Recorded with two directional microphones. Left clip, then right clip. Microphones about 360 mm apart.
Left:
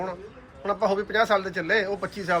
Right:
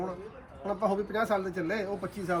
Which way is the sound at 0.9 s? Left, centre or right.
Centre.